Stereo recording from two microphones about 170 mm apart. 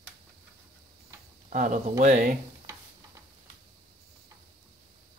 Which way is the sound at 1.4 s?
50° right (ahead or behind).